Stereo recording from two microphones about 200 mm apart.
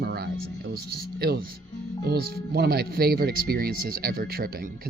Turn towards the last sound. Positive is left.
turn(degrees=-50)  # may be behind; listen again after turning